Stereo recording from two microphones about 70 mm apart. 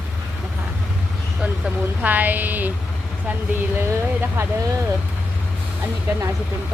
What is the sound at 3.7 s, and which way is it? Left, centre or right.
Speech, right.